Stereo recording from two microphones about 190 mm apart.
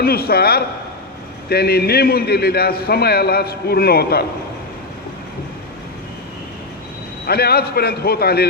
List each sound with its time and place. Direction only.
0.0 s a man's voice: 55° left (ahead or behind)
7.3 s a man's voice: 55° left (ahead or behind)